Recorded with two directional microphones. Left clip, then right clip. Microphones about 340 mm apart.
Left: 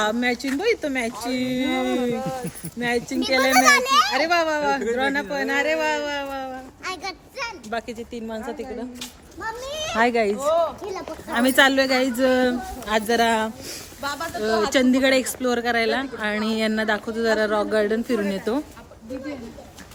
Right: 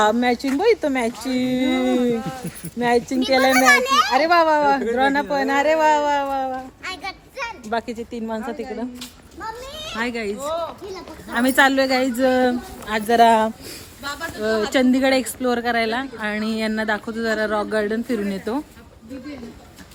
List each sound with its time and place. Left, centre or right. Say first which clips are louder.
0.0 s speech: right 5 dB; centre
2.1 s speech: even; left
2.7 s speech: right 5 dB; centre
3.5 s a child's voice: left 1 dB; centre
4.1 s speech: right 5 dB; centre
6.8 s a sound: even; centre
7.7 s a woman's voice: right 4 dB; centre
9.8 s a child's voice: left 6 dB; centre
10.3 s a sound: left 5 dB; left
11.3 s speech: right 1 dB; centre
14.0 s snake: left 1 dB; left
14.7 s speech: right 1 dB; centre